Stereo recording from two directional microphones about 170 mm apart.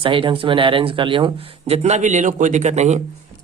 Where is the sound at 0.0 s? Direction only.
30° right (ahead or behind).